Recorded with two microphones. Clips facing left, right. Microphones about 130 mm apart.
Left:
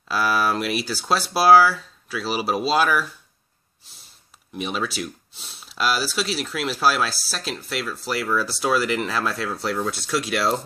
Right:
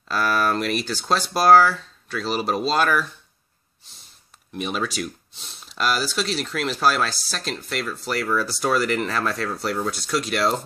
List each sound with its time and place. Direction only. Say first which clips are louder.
0.1 s speech: even; 5° left (ahead or behind)
4.6 s speech: right 1 dB; centre (ahead or behind)